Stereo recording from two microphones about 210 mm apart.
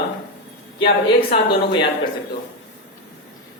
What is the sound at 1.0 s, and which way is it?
A man's voice, 25° left (ahead or behind).